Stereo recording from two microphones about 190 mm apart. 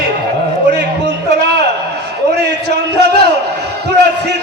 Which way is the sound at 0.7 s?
60° right (ahead or behind).